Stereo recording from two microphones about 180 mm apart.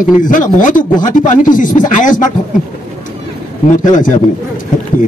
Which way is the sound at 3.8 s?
45° left (ahead or behind).